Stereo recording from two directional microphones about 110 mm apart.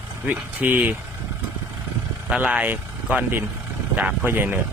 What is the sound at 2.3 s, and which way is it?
Speech, 10° right (ahead or behind).